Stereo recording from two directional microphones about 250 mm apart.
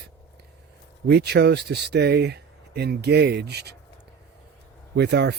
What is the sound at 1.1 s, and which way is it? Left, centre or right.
Speech, right.